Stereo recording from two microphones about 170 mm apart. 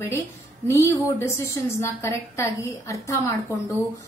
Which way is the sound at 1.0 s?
15° left (ahead or behind).